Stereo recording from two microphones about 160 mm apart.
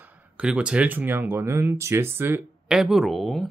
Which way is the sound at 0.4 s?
5° right (ahead or behind).